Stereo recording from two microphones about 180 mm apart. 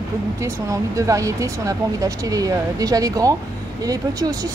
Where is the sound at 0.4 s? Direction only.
20° right (ahead or behind).